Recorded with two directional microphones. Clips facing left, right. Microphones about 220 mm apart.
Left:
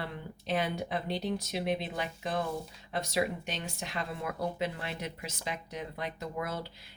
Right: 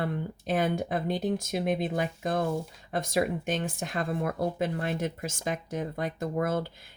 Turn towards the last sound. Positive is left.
turn(degrees=-50)  # may be behind; listen again after turning